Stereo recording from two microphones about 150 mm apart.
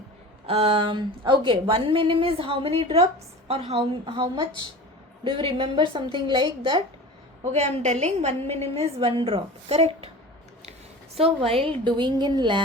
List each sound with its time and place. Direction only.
0.4 s a woman's voice: 40° right (ahead or behind)
7.5 s a woman's voice: 50° right (ahead or behind)
11.2 s a woman's voice: 40° right (ahead or behind)